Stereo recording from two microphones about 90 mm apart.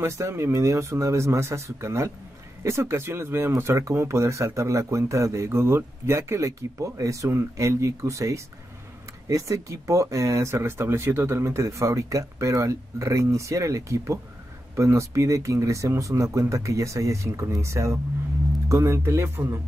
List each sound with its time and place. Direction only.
0.0 s speech: 30° right (ahead or behind)